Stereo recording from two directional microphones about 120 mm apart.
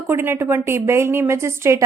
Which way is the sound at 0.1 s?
20° right (ahead or behind).